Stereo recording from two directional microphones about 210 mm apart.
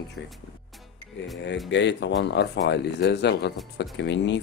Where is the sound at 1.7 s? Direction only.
60° left (ahead or behind).